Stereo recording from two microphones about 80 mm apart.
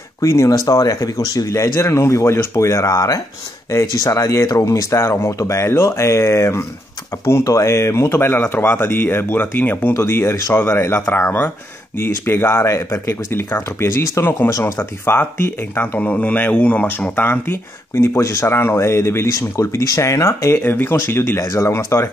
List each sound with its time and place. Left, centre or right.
0.2 s speech: left
9.9 s speech: left; by 17.1 s centre
17.1 s speech: left
20.5 s speech: left
20.9 s speech: left